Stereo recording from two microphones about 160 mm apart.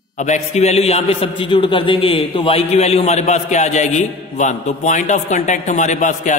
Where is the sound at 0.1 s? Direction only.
45° left (ahead or behind).